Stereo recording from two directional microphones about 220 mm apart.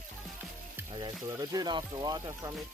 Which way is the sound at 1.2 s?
15° right (ahead or behind).